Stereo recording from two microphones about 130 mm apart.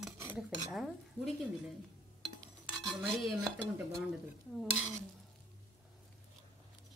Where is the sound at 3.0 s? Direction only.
Centre (ahead or behind).